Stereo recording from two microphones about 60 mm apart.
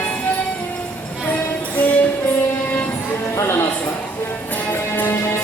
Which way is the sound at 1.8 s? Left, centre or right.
Left.